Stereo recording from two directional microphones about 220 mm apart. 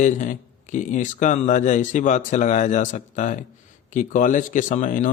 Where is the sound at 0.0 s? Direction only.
35° left (ahead or behind).